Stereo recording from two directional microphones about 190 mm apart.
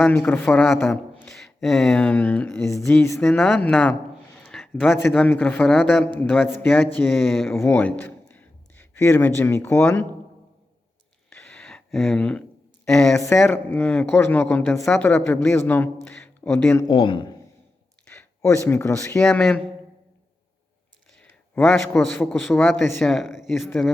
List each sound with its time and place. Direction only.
0.0 s speech: 10° left (ahead or behind)
11.3 s a sound: 10° left (ahead or behind)
12.9 s speech: centre (ahead or behind)
16.9 s a man's voice: 25° left (ahead or behind)
18.0 s speech: 5° left (ahead or behind)
19.2 s speech: 5° left (ahead or behind)
21.2 s a man's voice: 5° left (ahead or behind)